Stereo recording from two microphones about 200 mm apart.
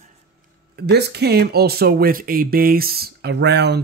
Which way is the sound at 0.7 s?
55° right (ahead or behind).